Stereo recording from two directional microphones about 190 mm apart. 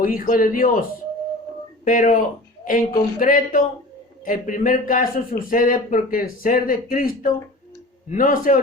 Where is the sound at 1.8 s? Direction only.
45° left (ahead or behind).